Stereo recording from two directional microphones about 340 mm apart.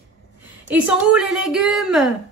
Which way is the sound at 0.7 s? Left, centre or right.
Centre.